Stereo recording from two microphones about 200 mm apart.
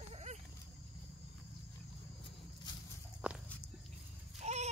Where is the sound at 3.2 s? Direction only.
5° right (ahead or behind).